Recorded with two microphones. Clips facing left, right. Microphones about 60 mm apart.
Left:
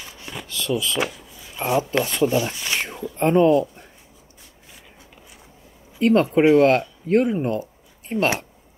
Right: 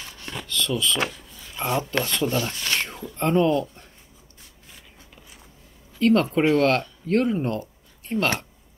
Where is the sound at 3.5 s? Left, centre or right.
Centre.